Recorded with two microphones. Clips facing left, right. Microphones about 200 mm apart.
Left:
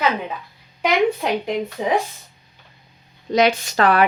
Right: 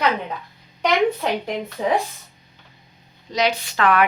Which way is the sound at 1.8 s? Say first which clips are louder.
Right 2 dB; 20° left (ahead or behind).